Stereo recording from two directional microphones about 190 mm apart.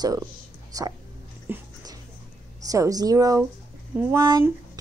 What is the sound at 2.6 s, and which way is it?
Female singing, 15° right (ahead or behind).